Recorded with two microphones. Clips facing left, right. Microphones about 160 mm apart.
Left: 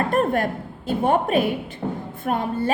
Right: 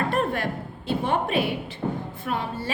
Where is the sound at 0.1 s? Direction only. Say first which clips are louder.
Left 5 dB; 45° left (ahead or behind).